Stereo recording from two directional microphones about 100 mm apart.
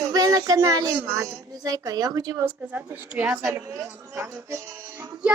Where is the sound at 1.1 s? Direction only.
30° right (ahead or behind).